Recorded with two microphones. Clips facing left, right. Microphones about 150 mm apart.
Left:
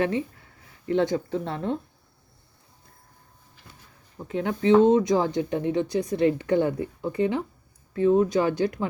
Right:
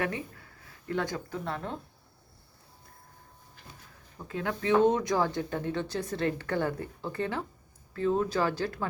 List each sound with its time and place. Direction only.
0.0 s speech: 25° left (ahead or behind)
4.2 s speech: 20° left (ahead or behind)